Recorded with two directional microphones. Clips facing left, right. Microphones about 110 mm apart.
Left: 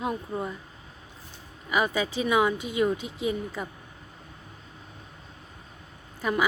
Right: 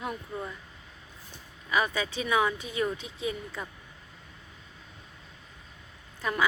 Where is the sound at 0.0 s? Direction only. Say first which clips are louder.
Left 5 dB; 25° left (ahead or behind).